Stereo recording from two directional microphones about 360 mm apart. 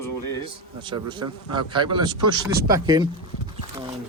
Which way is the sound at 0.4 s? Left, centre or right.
Centre.